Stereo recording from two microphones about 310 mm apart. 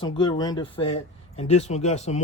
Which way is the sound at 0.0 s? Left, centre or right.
Centre.